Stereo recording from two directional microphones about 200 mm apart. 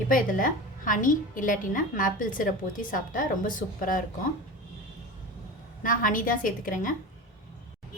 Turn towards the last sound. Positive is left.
turn(degrees=40)  # may be behind; listen again after turning